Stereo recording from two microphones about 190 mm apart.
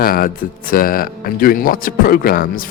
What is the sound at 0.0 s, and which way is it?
Music, 50° left (ahead or behind).